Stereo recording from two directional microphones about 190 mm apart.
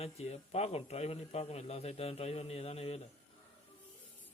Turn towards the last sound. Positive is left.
turn(degrees=30)  # may be behind; listen again after turning